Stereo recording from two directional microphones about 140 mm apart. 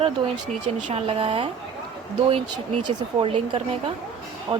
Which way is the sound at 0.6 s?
45° right (ahead or behind).